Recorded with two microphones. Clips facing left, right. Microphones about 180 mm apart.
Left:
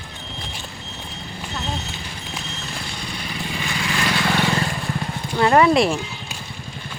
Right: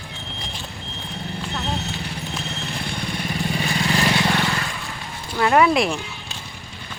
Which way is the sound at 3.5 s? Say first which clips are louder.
Right 3 dB; 35° right (ahead or behind).